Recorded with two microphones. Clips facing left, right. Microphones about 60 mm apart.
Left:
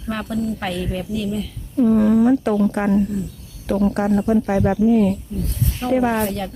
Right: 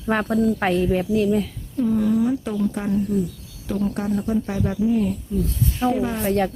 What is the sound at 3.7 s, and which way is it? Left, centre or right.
Speech, left.